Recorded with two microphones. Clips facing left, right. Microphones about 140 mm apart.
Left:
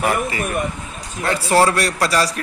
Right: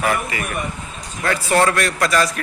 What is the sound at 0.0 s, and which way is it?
A man's voice, 30° left (ahead or behind).